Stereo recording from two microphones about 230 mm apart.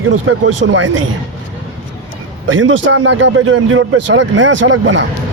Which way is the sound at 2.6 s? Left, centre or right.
Right.